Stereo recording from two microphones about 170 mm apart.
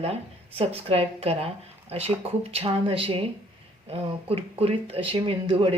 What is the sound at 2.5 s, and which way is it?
Speech, 30° right (ahead or behind).